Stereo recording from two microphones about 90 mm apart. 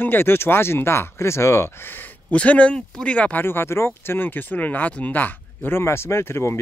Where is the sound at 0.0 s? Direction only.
25° left (ahead or behind).